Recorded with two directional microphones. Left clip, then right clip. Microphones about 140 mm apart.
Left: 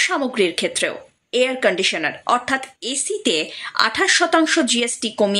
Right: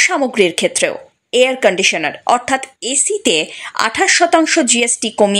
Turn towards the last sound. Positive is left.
turn(degrees=-25)  # may be behind; listen again after turning